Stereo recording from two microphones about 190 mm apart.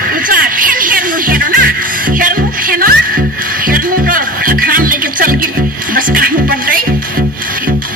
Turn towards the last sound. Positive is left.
turn(degrees=-50)  # may be behind; listen again after turning